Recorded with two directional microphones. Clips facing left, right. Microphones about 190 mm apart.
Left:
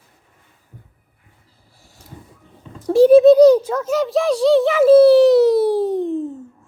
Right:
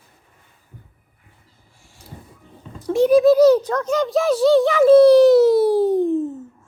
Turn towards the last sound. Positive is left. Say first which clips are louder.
# right 2 dB
turn(degrees=-5)  # may be behind; listen again after turning